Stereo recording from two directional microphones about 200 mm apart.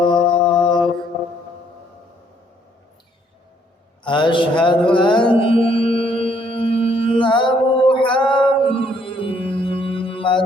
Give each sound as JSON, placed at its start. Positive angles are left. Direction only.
{"t": 0.0, "sound": "mantra", "side_deg": 25}
{"t": 4.0, "sound": "music", "side_deg": 25}